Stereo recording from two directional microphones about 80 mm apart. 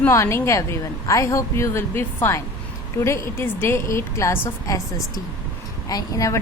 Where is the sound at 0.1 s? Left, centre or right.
Left.